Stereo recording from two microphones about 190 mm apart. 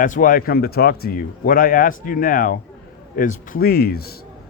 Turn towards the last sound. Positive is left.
turn(degrees=55)  # may be behind; listen again after turning